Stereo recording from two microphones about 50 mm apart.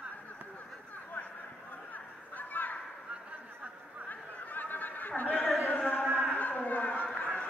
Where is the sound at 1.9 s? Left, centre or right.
Left.